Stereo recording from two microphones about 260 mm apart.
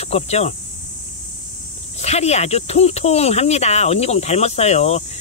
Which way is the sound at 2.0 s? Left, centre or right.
Left.